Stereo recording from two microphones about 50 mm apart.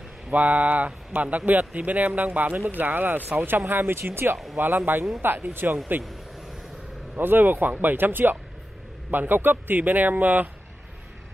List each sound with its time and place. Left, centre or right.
0.3 s speech: right
7.2 s speech: right